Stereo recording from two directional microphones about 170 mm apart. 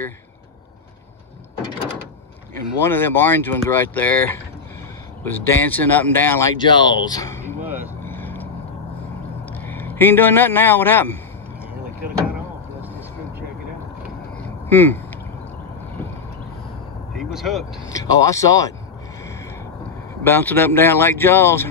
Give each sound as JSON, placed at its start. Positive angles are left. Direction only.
{"t": 2.8, "sound": "speech", "side_deg": 15}
{"t": 6.5, "sound": "speech", "side_deg": 25}
{"t": 7.4, "sound": "vehicle", "side_deg": -10}
{"t": 8.0, "sound": "vehicle", "side_deg": 10}
{"t": 9.5, "sound": "a man's voice", "side_deg": 10}
{"t": 14.7, "sound": "speech", "side_deg": 10}
{"t": 17.2, "sound": "vehicle", "side_deg": 0}
{"t": 17.9, "sound": "speech", "side_deg": 20}
{"t": 20.2, "sound": "speech", "side_deg": 10}